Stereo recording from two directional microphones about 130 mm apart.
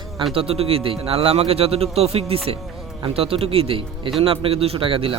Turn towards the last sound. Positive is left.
turn(degrees=-45)  # may be behind; listen again after turning